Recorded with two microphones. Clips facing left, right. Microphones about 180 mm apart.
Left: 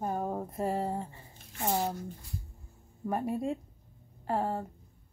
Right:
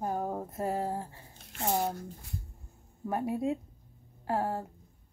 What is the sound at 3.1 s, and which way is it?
A woman's voice, centre (ahead or behind).